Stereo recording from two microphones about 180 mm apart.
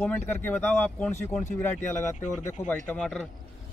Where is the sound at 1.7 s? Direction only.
45° left (ahead or behind).